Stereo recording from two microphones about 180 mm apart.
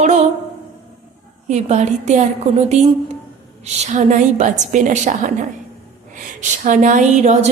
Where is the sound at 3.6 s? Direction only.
40° right (ahead or behind).